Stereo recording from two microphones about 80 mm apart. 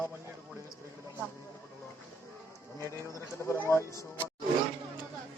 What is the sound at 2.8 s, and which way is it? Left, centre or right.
A man's voice, left.